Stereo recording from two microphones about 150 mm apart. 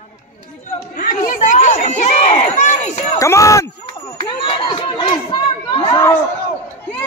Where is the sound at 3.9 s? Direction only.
30° left (ahead or behind).